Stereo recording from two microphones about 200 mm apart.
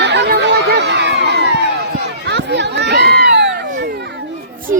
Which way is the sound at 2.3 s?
60° right (ahead or behind).